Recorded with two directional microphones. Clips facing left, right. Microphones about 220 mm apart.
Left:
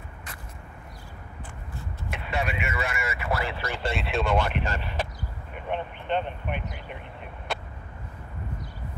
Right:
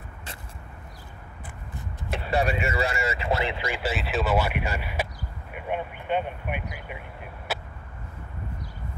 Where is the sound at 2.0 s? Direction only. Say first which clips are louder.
Right 5 dB; 35° right (ahead or behind); by 7.0 s 10° right (ahead or behind).